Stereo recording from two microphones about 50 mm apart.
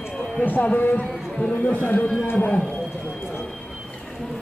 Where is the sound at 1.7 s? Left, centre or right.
Left.